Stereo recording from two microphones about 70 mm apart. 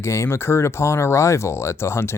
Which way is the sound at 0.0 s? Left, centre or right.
Left.